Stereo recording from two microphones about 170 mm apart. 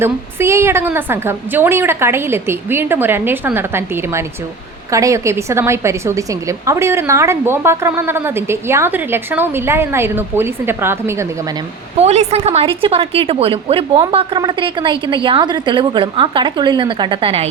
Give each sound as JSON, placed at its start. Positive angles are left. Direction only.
{"t": 0.0, "sound": "a woman's voice", "side_deg": -15}
{"t": 11.9, "sound": "a woman's voice", "side_deg": -40}